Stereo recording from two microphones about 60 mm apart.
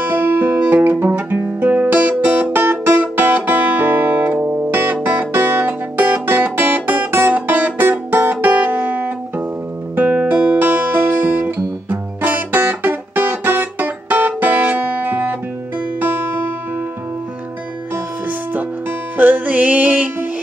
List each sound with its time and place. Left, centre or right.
0.0 s music: right
1.1 s guitar: right
4.6 s music: right
19.1 s music: right